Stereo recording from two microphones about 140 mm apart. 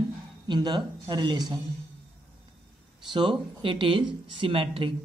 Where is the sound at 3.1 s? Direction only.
35° right (ahead or behind).